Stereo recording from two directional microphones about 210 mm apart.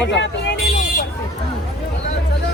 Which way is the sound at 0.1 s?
55° left (ahead or behind).